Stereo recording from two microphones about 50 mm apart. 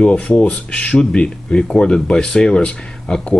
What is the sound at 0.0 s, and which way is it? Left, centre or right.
Speech, left.